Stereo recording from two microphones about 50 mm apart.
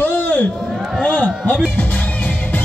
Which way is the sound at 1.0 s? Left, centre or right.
Left.